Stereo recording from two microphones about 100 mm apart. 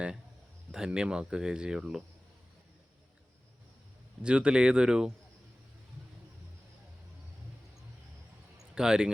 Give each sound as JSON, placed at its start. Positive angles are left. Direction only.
{"t": 0.7, "sound": "speech", "side_deg": -5}
{"t": 4.2, "sound": "speech", "side_deg": -10}
{"t": 8.5, "sound": "a sound", "side_deg": -5}